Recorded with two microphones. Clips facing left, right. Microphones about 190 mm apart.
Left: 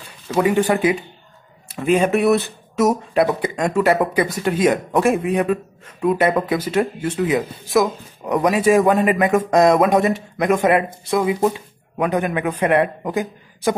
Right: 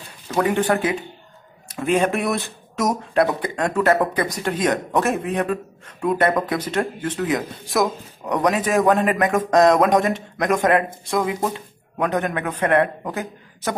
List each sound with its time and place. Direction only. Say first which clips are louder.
0.3 s speech: left 3 dB; 10° left (ahead or behind)